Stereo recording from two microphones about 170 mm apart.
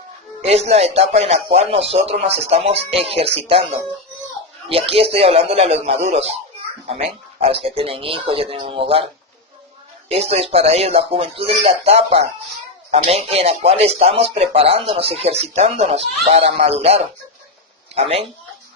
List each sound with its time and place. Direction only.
0.4 s speech: 40° right (ahead or behind)
10.1 s speech: 35° right (ahead or behind)